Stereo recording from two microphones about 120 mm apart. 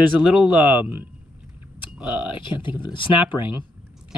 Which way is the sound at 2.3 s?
40° left (ahead or behind).